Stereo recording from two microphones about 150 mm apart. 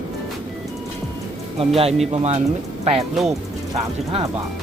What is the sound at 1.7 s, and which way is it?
Speech, 40° right (ahead or behind).